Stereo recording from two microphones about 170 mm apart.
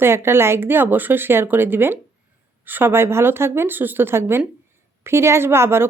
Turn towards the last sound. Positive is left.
turn(degrees=-15)  # may be behind; listen again after turning